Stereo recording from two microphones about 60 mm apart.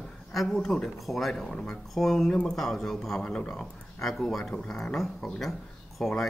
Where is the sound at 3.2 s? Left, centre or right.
Centre.